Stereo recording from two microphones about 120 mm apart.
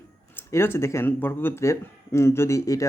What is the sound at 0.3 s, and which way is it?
Speech, 20° left (ahead or behind).